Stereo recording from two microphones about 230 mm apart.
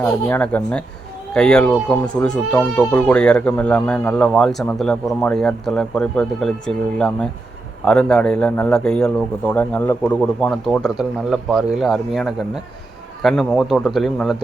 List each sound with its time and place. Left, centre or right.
0.0 s speech: centre